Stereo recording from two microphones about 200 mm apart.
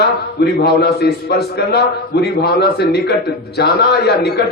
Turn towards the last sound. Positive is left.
turn(degrees=55)  # may be behind; listen again after turning